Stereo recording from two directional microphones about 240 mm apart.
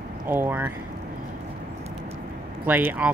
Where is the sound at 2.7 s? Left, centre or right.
Centre.